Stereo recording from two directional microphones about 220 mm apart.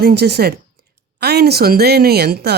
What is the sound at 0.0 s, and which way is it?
Speech, 45° right (ahead or behind).